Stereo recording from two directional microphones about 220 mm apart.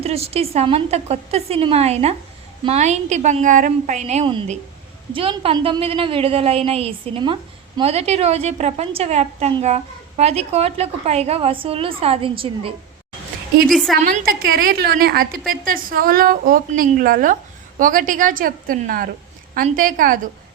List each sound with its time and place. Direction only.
0.0 s a woman's voice: 25° right (ahead or behind)
13.7 s a woman's voice: centre (ahead or behind)
14.0 s a woman's voice: 40° right (ahead or behind)